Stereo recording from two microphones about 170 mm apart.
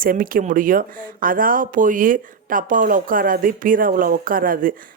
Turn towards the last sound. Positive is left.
turn(degrees=-55)  # may be behind; listen again after turning